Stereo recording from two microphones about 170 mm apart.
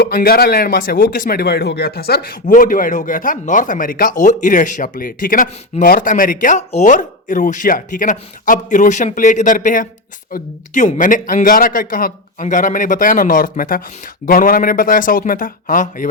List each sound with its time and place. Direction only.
0.0 s speech: 65° left (ahead or behind)